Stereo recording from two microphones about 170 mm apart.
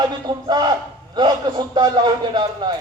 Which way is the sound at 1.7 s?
25° right (ahead or behind).